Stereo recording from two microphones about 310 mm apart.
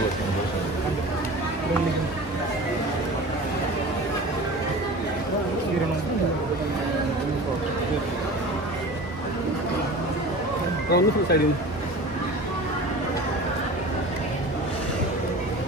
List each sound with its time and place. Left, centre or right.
10.9 s speech: left